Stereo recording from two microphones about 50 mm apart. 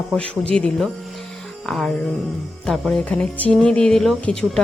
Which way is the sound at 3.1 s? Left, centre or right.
Left.